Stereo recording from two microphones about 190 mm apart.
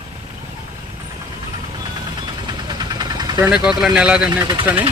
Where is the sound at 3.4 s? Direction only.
5° right (ahead or behind).